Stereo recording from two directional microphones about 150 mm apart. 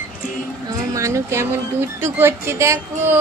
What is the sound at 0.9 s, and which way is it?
Speech, 20° right (ahead or behind).